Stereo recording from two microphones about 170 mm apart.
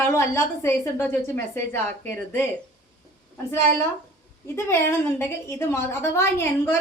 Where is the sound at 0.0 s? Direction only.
15° left (ahead or behind).